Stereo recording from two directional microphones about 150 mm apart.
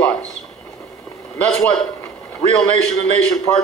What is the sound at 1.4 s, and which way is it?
Speech, 5° left (ahead or behind).